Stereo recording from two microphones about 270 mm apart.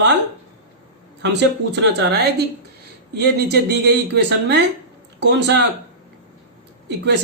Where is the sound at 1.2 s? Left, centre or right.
Right.